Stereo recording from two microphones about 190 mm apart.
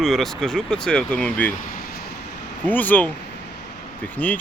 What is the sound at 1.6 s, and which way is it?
Vehicle, 50° left (ahead or behind).